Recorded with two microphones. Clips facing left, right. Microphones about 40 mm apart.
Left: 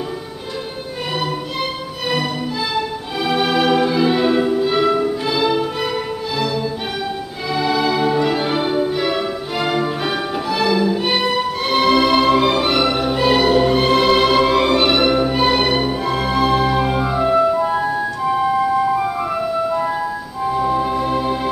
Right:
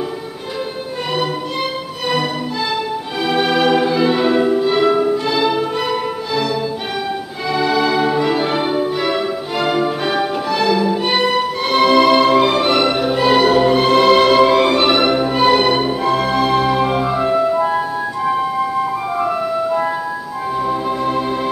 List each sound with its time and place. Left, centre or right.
1.1 s music: centre
3.3 s music: centre